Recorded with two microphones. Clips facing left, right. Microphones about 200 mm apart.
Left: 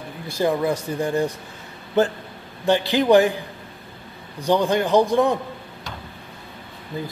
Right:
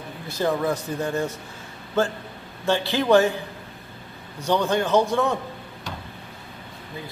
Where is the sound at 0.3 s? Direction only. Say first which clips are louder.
Left 2 dB; 10° left (ahead or behind).